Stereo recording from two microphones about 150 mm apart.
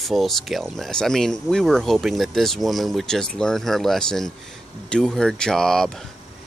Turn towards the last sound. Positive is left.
turn(degrees=5)  # may be behind; listen again after turning